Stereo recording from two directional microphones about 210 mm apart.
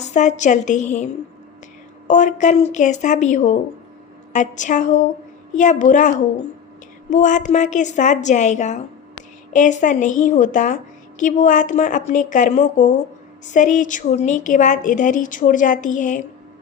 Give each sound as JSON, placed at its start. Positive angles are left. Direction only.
{"t": 0.0, "sound": "a woman's voice", "side_deg": 35}
{"t": 2.0, "sound": "a woman's voice", "side_deg": 35}